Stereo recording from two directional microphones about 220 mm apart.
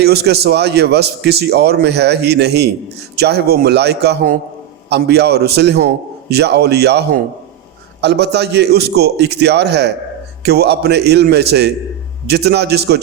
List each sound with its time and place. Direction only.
0.0 s a man's voice: 45° right (ahead or behind)